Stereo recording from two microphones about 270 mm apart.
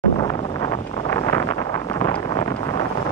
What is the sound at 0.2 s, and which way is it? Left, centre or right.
Wind noise, centre.